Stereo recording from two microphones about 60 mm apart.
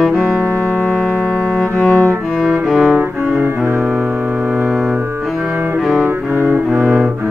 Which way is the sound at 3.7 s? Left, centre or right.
Right.